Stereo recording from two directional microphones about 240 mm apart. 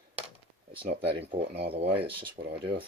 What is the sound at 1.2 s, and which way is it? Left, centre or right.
Speech, right.